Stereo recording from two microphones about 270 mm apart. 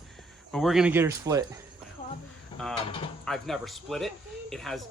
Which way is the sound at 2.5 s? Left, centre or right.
Centre.